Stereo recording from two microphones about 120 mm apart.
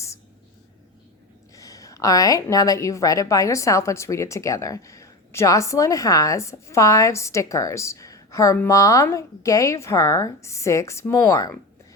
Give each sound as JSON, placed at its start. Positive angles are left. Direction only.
{"t": 1.5, "sound": "a woman's voice", "side_deg": 30}